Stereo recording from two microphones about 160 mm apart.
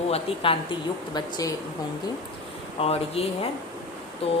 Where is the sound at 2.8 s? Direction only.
40° left (ahead or behind).